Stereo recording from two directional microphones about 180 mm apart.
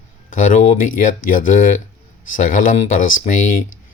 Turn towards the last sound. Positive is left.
turn(degrees=45)  # may be behind; listen again after turning